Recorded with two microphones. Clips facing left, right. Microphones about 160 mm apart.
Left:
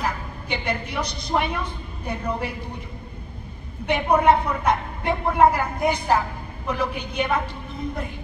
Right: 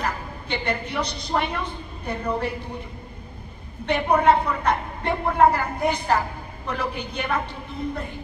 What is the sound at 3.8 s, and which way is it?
A woman's voice, 10° left (ahead or behind).